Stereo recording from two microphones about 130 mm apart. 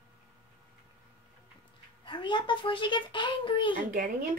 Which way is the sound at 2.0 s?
40° left (ahead or behind).